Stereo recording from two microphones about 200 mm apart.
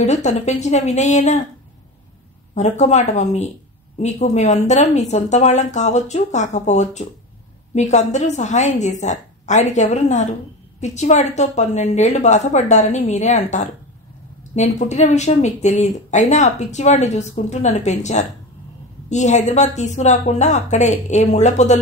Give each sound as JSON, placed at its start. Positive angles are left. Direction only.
{"t": 0.0, "sound": "speech", "side_deg": 35}
{"t": 2.5, "sound": "speech", "side_deg": 35}